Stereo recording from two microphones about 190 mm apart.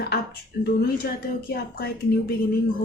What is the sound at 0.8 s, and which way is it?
A woman's voice, 55° left (ahead or behind).